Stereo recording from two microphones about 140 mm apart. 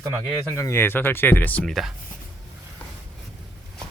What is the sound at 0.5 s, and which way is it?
Speech, 20° left (ahead or behind).